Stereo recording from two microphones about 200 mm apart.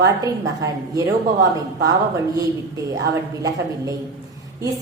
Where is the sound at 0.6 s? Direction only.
15° right (ahead or behind).